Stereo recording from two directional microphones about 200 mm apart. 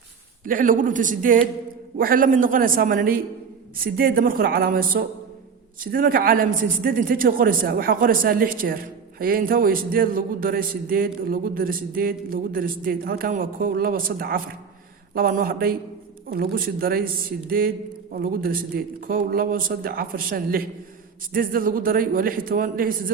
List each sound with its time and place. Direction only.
0.4 s a man's voice: 45° right (ahead or behind)